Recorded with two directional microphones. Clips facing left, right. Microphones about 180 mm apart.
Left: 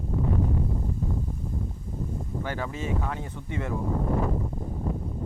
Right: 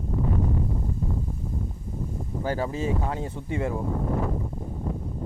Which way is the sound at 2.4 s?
35° right (ahead or behind).